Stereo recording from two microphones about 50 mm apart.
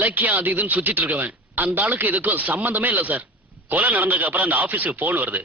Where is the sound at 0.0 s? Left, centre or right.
Right.